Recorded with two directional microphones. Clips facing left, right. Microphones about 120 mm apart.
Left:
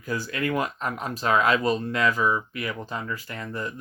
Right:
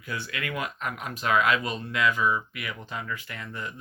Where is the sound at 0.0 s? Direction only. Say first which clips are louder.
Left 6 dB; 40° left (ahead or behind).